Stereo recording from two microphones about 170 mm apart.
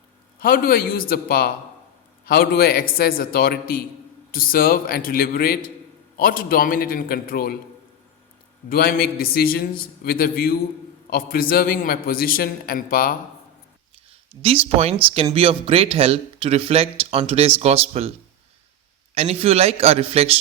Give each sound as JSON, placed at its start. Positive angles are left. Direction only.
{"t": 0.3, "sound": "a man's voice", "side_deg": 60}
{"t": 8.7, "sound": "a man's voice", "side_deg": 65}
{"t": 14.4, "sound": "speech", "side_deg": -35}
{"t": 19.1, "sound": "speech", "side_deg": -35}